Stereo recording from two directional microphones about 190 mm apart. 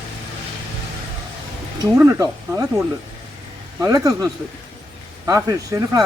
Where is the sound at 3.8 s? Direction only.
20° right (ahead or behind).